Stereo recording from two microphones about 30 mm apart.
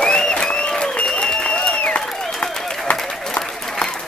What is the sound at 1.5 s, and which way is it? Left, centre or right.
Applause, left.